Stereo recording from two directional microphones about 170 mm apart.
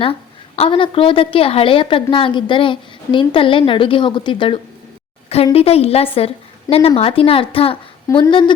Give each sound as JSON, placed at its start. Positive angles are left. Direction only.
{"t": 0.0, "sound": "a woman's voice", "side_deg": 35}
{"t": 8.0, "sound": "speech", "side_deg": 20}